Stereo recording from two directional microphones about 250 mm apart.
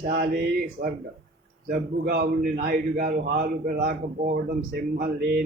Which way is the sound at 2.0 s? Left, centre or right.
Right.